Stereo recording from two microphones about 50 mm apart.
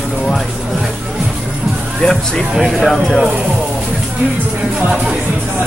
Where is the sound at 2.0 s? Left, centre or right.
Centre.